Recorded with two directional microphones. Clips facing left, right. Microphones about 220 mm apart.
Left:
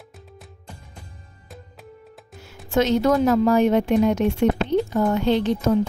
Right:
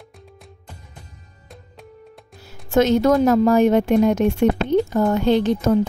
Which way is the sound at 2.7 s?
50° right (ahead or behind).